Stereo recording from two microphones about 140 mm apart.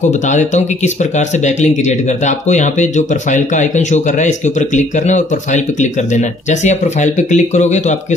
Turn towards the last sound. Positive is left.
turn(degrees=55)  # may be behind; listen again after turning